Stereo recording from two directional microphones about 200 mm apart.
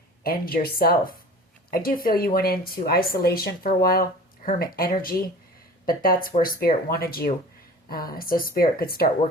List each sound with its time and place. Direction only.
0.2 s speech: 45° left (ahead or behind)